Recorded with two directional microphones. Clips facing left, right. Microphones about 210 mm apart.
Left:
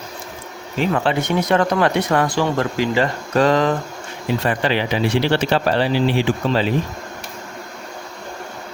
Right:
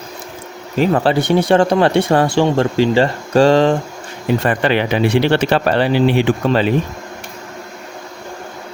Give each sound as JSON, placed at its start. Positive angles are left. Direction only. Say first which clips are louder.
{"t": 0.8, "sound": "speech", "louder": "right 5 dB", "side_deg": -35}
{"t": 4.4, "sound": "speech", "louder": "right 3 dB", "side_deg": -60}